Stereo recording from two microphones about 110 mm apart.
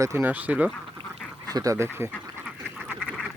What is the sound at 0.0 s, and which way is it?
Speech, 20° right (ahead or behind).